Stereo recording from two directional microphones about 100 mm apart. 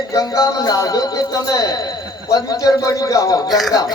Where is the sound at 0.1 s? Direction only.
35° left (ahead or behind).